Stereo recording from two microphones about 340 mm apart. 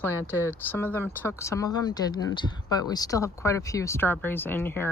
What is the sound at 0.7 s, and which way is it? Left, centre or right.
Speech, centre.